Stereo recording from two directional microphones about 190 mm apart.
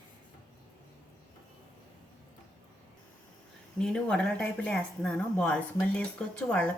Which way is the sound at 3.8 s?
5° left (ahead or behind).